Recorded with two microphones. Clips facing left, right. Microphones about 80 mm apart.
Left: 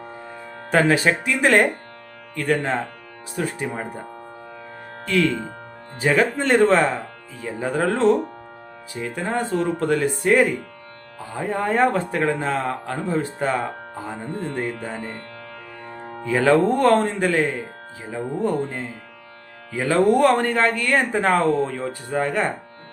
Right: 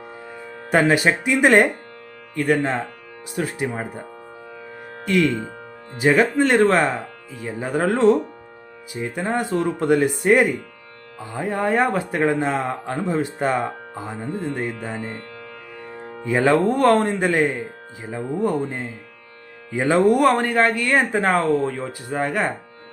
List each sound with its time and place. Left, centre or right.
0.3 s speech: centre
5.0 s speech: centre
6.3 s speech: centre
9.8 s speech: centre
16.2 s speech: centre
16.5 s speech: centre
19.7 s speech: centre